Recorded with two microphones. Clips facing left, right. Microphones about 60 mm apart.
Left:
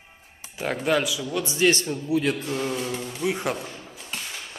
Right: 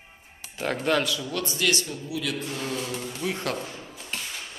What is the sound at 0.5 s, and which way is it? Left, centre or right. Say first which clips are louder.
Speech: left 1 dB; centre.